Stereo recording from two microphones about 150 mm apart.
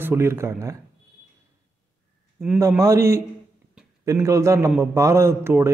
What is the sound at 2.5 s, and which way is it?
Speech, 20° right (ahead or behind).